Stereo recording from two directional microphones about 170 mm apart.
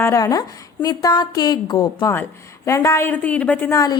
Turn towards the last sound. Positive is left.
turn(degrees=20)  # may be behind; listen again after turning